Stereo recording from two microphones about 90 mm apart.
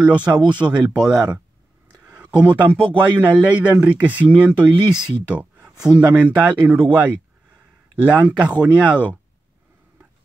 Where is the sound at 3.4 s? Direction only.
15° right (ahead or behind).